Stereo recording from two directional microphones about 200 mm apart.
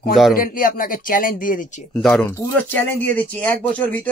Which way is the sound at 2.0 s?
5° left (ahead or behind).